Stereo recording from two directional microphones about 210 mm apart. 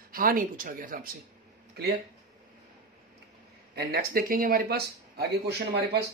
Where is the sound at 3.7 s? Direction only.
45° right (ahead or behind).